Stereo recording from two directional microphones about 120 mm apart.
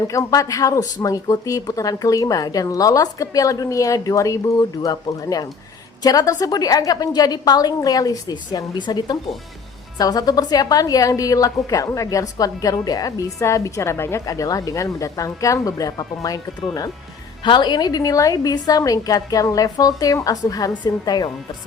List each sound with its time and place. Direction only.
0.1 s a woman's voice: 25° left (ahead or behind)
17.4 s a woman's voice: 40° left (ahead or behind)